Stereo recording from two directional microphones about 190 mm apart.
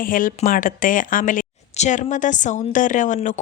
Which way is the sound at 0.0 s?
45° left (ahead or behind).